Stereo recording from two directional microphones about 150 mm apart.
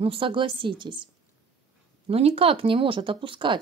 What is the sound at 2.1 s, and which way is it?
Speech, 40° right (ahead or behind).